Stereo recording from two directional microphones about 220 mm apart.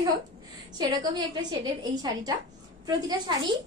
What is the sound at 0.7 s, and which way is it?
A woman's voice, 20° right (ahead or behind).